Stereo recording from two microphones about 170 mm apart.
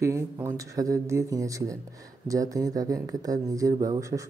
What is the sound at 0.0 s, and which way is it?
Speech, 15° right (ahead or behind).